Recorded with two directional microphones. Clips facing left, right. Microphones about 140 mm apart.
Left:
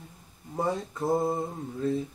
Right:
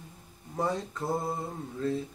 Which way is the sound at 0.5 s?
15° left (ahead or behind).